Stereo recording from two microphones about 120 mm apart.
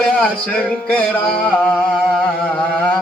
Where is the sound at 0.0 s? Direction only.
10° left (ahead or behind).